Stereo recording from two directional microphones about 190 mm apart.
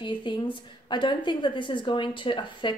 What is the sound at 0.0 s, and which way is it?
A woman's voice, 25° left (ahead or behind).